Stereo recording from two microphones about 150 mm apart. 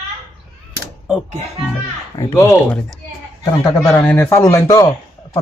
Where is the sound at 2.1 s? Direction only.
25° left (ahead or behind).